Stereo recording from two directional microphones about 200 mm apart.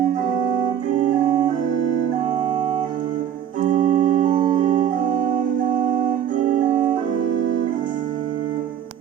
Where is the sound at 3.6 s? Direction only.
40° right (ahead or behind).